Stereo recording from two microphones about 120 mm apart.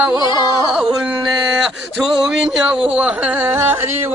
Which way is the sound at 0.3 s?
40° left (ahead or behind).